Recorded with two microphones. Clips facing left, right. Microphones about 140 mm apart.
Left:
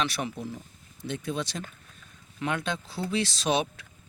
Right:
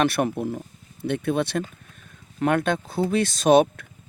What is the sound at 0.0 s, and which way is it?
Speech, 55° right (ahead or behind).